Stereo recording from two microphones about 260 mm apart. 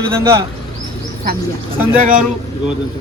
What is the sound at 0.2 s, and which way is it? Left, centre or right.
Speech, centre.